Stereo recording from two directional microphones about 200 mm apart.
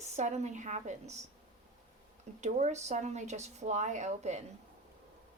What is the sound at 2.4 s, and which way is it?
Speech, 35° right (ahead or behind).